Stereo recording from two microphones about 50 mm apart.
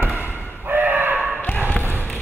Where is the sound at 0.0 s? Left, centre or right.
Right.